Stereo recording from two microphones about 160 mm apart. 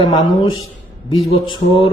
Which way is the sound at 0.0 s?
25° left (ahead or behind).